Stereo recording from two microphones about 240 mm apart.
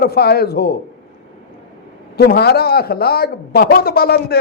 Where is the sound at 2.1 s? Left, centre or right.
Left.